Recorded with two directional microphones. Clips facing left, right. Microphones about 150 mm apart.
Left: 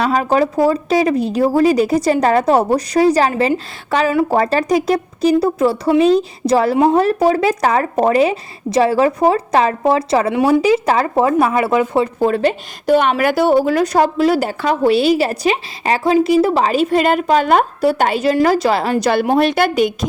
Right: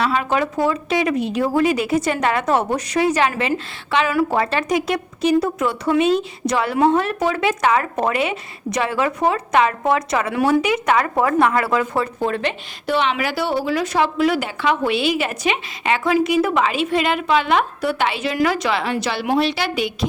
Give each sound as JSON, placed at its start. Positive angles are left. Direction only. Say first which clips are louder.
{"t": 0.0, "sound": "a woman's voice", "louder": "left 5 dB", "side_deg": 40}
{"t": 12.2, "sound": "a woman's voice", "louder": "left 7 dB", "side_deg": 35}